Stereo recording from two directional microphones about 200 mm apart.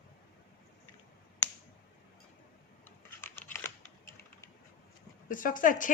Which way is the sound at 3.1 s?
10° left (ahead or behind).